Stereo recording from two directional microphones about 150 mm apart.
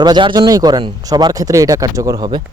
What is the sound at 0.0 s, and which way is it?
Speech, 30° right (ahead or behind).